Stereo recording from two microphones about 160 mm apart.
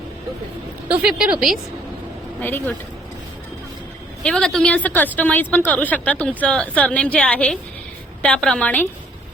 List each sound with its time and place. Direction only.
1.0 s a woman's voice: 5° right (ahead or behind)
2.4 s a woman's voice: 10° left (ahead or behind)
4.2 s a woman's voice: 5° left (ahead or behind)